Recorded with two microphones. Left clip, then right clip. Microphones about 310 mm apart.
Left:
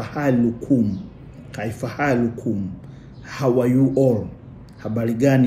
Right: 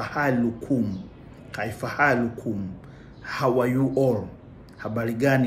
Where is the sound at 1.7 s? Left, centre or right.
Centre.